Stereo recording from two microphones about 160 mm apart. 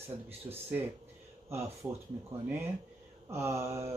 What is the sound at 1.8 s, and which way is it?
Speech, 10° right (ahead or behind).